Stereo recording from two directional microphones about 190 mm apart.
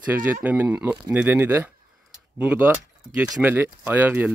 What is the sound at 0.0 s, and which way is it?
Speech, 10° right (ahead or behind).